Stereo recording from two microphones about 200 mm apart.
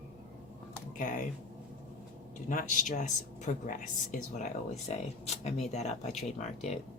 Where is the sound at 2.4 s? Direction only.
40° left (ahead or behind).